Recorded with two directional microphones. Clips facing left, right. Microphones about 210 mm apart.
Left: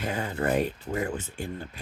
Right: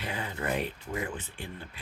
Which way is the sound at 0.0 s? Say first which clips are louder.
Left 6 dB; 45° left (ahead or behind).